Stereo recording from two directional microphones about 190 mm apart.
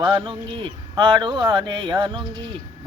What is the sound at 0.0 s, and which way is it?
Speech, 25° right (ahead or behind).